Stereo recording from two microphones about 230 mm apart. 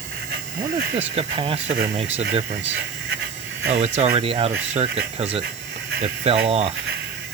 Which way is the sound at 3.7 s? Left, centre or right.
Right.